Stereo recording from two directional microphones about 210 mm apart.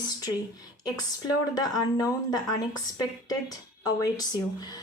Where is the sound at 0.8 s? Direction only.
20° left (ahead or behind).